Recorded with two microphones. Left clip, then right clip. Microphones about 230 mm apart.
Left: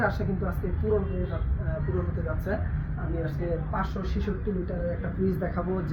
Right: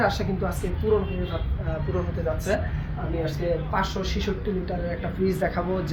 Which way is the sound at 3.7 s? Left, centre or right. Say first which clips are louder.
Right 6 dB; right.